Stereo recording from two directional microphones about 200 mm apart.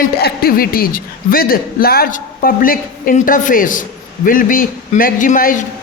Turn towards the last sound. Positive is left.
turn(degrees=40)  # may be behind; listen again after turning